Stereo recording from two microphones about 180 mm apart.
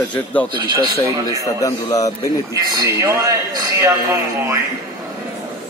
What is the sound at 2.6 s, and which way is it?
A man's voice, 20° right (ahead or behind).